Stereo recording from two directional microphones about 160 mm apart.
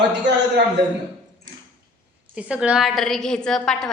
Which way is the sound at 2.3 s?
10° right (ahead or behind).